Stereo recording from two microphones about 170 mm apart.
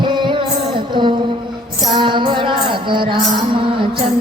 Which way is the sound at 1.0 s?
30° right (ahead or behind).